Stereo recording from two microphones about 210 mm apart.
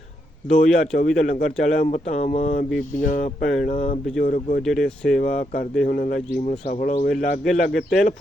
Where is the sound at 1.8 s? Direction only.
35° left (ahead or behind).